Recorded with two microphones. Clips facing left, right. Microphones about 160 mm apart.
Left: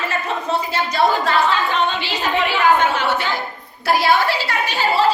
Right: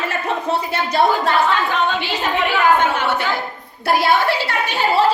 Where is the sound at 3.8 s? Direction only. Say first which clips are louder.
Even; 55° right (ahead or behind).